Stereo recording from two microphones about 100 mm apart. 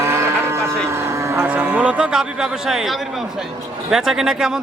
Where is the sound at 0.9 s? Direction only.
30° right (ahead or behind).